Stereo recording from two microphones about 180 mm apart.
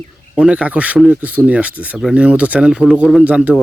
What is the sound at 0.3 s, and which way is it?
Speech, 5° right (ahead or behind).